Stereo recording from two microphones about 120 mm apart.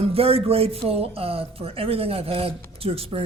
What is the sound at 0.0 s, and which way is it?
Speech, 55° right (ahead or behind).